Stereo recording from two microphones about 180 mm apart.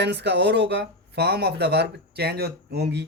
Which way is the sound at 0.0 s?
70° right (ahead or behind).